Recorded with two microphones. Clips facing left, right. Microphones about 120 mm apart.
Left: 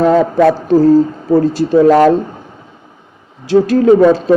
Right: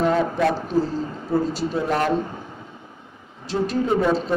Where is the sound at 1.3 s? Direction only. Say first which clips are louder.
Left 10 dB; 85° left.